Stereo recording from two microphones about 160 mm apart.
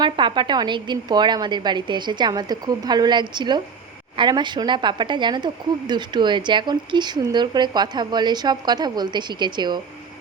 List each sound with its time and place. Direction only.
0.0 s speech: 30° right (ahead or behind)